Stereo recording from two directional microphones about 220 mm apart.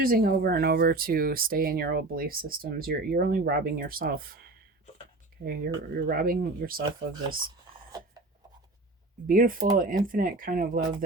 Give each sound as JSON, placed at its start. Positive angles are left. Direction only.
{"t": 0.0, "sound": "speech", "side_deg": -40}
{"t": 9.2, "sound": "speech", "side_deg": -40}